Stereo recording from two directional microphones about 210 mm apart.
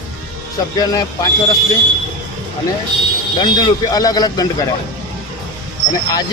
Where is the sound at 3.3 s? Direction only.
20° left (ahead or behind).